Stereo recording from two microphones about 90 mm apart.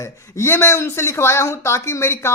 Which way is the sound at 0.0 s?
30° left (ahead or behind).